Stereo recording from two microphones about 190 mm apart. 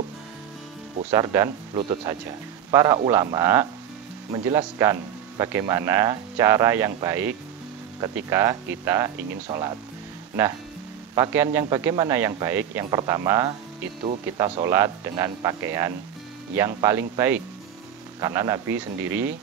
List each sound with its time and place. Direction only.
1.1 s speech: 15° right (ahead or behind)
11.1 s speech: 15° right (ahead or behind)
18.2 s speech: 15° right (ahead or behind)